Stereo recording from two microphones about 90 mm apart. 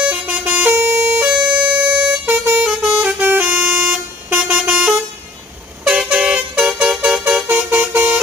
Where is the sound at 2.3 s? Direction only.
20° right (ahead or behind).